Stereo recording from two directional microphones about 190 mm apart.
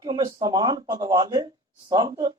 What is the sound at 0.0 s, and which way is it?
Speech, 20° right (ahead or behind).